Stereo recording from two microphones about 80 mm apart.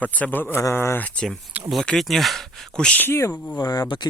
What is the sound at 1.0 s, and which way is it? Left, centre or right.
Speech, centre.